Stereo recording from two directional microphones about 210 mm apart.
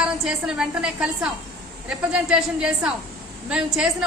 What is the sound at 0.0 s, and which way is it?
Speech, 5° right (ahead or behind).